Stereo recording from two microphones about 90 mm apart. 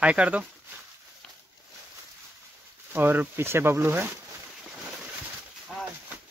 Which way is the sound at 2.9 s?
25° right (ahead or behind).